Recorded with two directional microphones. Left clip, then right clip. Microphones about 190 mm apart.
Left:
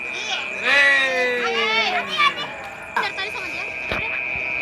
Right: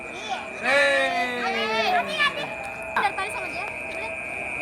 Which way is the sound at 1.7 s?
30° right (ahead or behind).